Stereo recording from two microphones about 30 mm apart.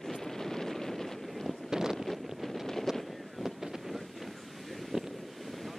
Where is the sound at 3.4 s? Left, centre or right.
Centre.